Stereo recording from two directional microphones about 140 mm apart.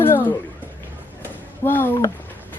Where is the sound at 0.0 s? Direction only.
15° left (ahead or behind).